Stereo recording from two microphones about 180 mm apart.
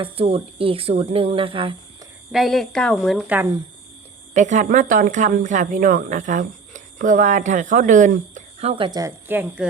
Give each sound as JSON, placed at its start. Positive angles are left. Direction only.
{"t": 0.0, "sound": "speech", "side_deg": -30}
{"t": 2.3, "sound": "speech", "side_deg": 0}
{"t": 4.4, "sound": "speech", "side_deg": -45}
{"t": 8.7, "sound": "speech", "side_deg": -25}